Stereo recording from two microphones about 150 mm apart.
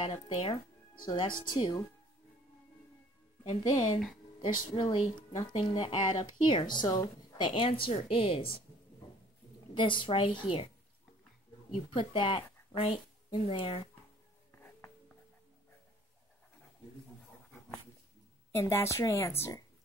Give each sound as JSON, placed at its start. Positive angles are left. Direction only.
{"t": 0.0, "sound": "speech", "side_deg": 40}
{"t": 3.6, "sound": "speech", "side_deg": 30}
{"t": 9.8, "sound": "speech", "side_deg": 35}
{"t": 11.9, "sound": "a woman's voice", "side_deg": 35}
{"t": 18.5, "sound": "a woman's voice", "side_deg": 15}